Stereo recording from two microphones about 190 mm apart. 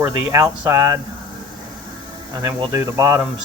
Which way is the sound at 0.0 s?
15° right (ahead or behind).